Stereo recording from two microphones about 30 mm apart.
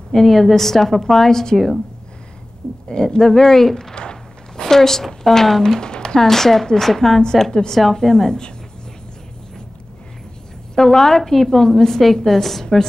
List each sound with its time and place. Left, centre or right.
0.1 s a woman's voice: centre
2.9 s a woman's voice: centre
3.9 s a sound: left
4.6 s a woman's voice: centre
5.8 s a sound: left
6.1 s a woman's voice: centre
7.8 s a woman's voice: centre
8.1 s a woman's voice: centre
10.8 s a woman's voice: centre